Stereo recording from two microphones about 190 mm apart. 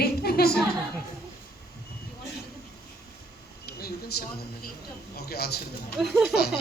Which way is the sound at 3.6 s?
55° left (ahead or behind).